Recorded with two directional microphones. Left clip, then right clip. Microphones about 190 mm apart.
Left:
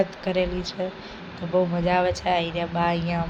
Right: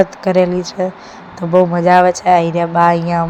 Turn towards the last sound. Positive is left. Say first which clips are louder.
# right 13 dB
turn(degrees=-40)  # may be behind; listen again after turning